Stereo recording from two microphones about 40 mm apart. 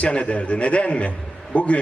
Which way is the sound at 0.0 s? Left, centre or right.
Left.